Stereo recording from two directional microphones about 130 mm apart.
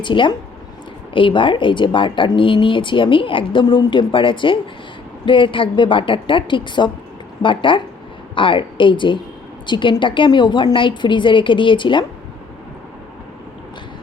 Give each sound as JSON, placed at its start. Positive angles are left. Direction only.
{"t": 0.0, "sound": "speech", "side_deg": 40}